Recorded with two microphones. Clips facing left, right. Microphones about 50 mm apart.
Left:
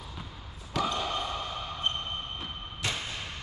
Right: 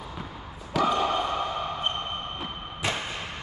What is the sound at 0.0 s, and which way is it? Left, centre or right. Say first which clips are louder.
Basketball bounce: right 6 dB; right.